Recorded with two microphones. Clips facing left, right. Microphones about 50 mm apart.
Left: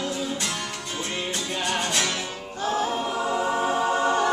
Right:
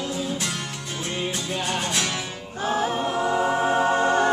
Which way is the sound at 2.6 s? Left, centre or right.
Centre.